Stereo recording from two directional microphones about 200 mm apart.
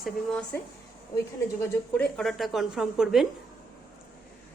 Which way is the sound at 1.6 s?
5° left (ahead or behind).